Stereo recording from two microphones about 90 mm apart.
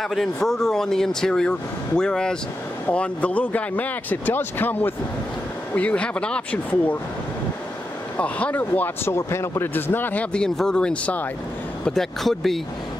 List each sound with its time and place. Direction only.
0.0 s speech: centre (ahead or behind)
8.2 s speech: 15° left (ahead or behind)
10.3 s speech: 10° left (ahead or behind)